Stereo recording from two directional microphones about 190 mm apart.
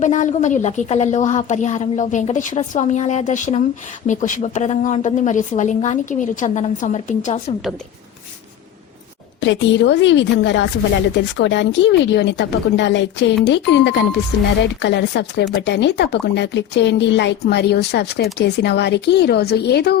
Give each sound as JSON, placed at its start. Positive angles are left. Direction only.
{"t": 0.0, "sound": "a woman's voice", "side_deg": 40}
{"t": 9.4, "sound": "speech", "side_deg": 70}